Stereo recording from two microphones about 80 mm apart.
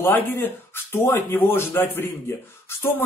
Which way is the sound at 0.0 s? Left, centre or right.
Left.